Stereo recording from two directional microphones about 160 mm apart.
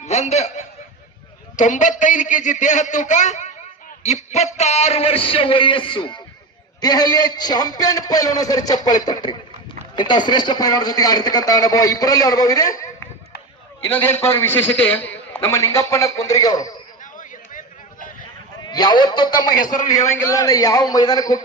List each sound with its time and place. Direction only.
0.0 s a man's voice: 45° left (ahead or behind); by 16.7 s 25° left (ahead or behind)
17.0 s a sound: 55° left (ahead or behind)
18.6 s speech: 25° left (ahead or behind)